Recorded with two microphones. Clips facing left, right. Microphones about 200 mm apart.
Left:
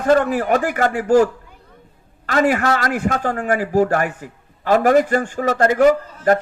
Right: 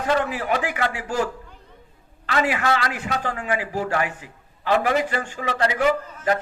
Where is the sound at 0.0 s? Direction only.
50° left (ahead or behind).